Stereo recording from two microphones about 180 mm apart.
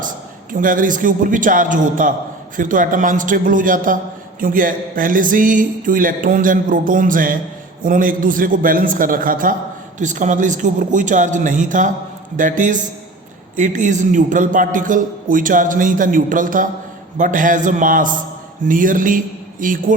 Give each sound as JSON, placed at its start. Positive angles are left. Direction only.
{"t": 0.5, "sound": "a man's voice", "side_deg": -50}